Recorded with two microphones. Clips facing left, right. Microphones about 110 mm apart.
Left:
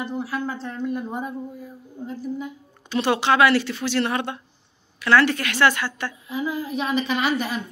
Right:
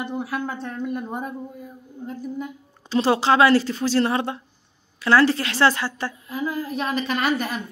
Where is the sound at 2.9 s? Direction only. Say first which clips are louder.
Right 2 dB; 35° right (ahead or behind).